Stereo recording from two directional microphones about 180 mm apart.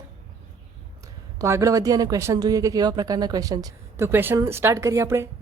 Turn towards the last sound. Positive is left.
turn(degrees=-15)  # may be behind; listen again after turning